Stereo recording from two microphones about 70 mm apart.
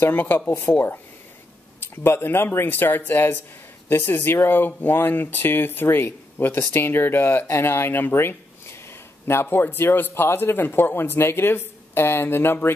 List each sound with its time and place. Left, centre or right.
0.1 s speech: left
2.0 s speech: left